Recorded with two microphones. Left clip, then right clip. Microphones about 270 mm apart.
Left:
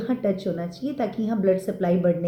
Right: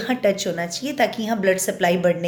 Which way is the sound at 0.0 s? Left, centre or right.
Centre.